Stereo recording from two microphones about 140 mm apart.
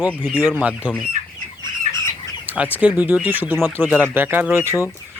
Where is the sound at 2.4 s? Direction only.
10° right (ahead or behind).